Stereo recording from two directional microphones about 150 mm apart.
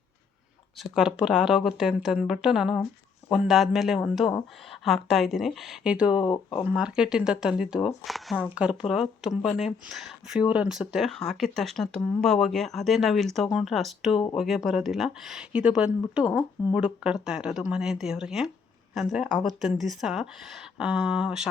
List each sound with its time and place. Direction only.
0.8 s speech: 5° right (ahead or behind)
6.2 s speech: 30° left (ahead or behind)
6.7 s speech: 5° right (ahead or behind)